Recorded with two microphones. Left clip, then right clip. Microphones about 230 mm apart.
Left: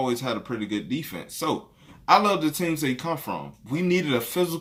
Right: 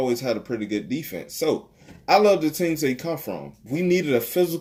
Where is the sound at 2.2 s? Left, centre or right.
Left.